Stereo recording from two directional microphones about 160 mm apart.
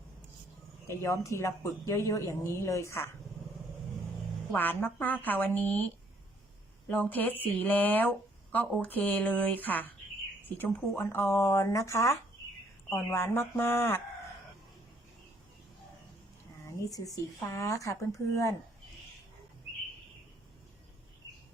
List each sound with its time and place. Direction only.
0.9 s speech: 20° left (ahead or behind)
4.5 s speech: 10° left (ahead or behind)
16.6 s speech: 20° left (ahead or behind)